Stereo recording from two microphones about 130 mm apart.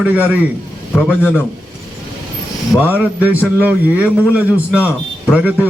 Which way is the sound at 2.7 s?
10° right (ahead or behind).